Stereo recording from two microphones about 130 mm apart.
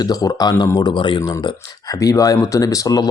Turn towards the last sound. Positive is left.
turn(degrees=30)  # may be behind; listen again after turning